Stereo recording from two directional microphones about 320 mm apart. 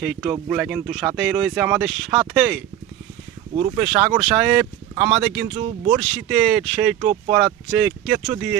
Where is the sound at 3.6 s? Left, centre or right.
Centre.